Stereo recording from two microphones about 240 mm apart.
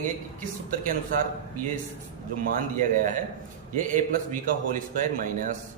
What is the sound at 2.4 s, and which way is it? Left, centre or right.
A man's voice, right.